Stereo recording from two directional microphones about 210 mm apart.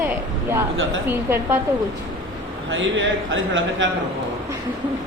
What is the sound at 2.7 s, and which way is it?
Speech, 65° right (ahead or behind).